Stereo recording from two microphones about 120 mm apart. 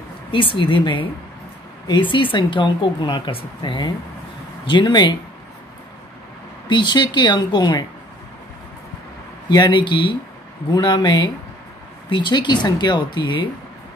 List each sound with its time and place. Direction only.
0.3 s speech: 45° left (ahead or behind)
6.7 s speech: 40° left (ahead or behind)
9.5 s speech: 40° left (ahead or behind)